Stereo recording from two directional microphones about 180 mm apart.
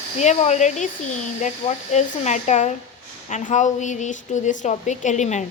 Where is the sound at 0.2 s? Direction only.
40° left (ahead or behind).